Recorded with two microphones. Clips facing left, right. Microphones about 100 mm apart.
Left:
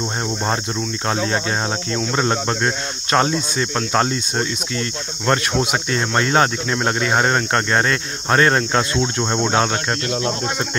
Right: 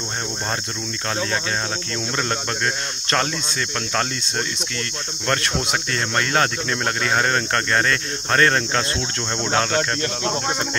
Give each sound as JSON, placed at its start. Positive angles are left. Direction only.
{"t": 2.0, "sound": "speech", "side_deg": 20}